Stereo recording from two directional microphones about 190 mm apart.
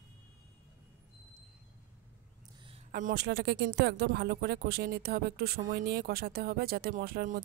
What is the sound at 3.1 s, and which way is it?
Speech, 60° right (ahead or behind).